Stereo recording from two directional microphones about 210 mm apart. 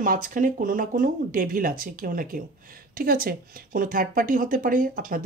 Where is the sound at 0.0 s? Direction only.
40° right (ahead or behind).